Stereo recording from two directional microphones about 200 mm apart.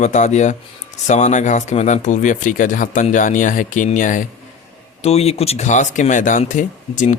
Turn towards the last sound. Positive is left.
turn(degrees=40)  # may be behind; listen again after turning